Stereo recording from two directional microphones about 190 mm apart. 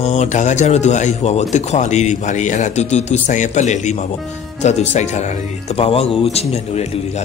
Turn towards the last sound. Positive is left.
turn(degrees=35)  # may be behind; listen again after turning